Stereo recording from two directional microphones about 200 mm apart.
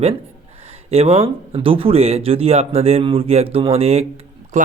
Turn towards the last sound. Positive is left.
turn(degrees=-40)  # may be behind; listen again after turning